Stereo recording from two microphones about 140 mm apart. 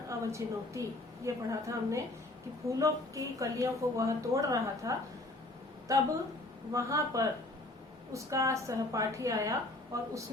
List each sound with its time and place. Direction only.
0.1 s a woman's voice: 20° right (ahead or behind)